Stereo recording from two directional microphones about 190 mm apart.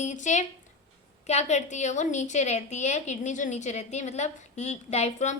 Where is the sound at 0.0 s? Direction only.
40° left (ahead or behind).